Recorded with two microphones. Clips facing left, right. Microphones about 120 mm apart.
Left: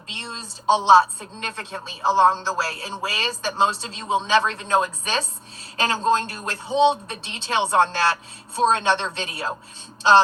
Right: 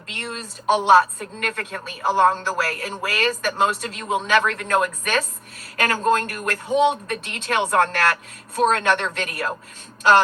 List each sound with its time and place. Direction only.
0.1 s a woman's voice: 20° left (ahead or behind)